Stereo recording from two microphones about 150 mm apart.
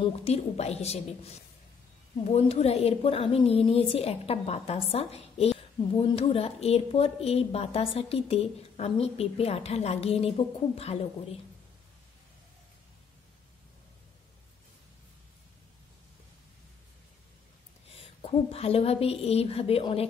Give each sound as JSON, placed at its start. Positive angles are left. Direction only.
{"t": 0.0, "sound": "a woman's voice", "side_deg": 45}
{"t": 2.3, "sound": "a woman's voice", "side_deg": 45}
{"t": 17.9, "sound": "a woman's voice", "side_deg": 40}